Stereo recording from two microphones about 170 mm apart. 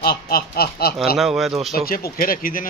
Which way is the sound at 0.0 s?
65° left (ahead or behind).